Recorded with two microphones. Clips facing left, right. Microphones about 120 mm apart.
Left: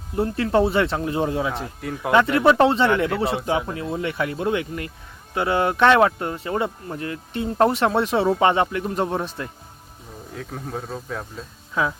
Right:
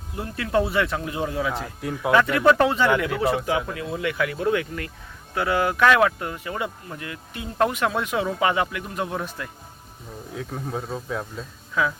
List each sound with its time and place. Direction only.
0.2 s speech: 30° left (ahead or behind)
1.8 s speech: centre (ahead or behind)
2.1 s speech: 25° left (ahead or behind)
10.3 s speech: centre (ahead or behind)
11.7 s speech: 25° left (ahead or behind)